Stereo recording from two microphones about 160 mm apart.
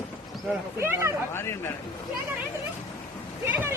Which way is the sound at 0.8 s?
15° right (ahead or behind).